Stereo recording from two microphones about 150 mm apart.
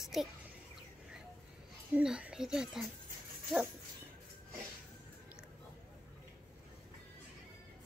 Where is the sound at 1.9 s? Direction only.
5° right (ahead or behind).